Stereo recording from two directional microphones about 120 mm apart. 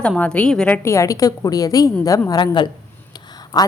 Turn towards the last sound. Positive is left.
turn(degrees=35)  # may be behind; listen again after turning